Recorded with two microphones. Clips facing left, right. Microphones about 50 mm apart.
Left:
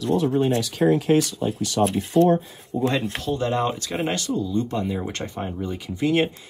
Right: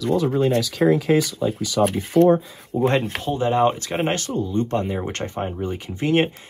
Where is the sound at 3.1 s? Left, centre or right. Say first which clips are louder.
Right 2 dB; right.